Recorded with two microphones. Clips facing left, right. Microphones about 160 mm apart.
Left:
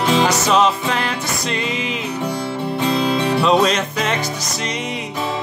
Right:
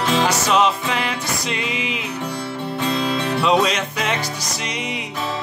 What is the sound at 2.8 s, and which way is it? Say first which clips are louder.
Music: left 3 dB; 20° left (ahead or behind).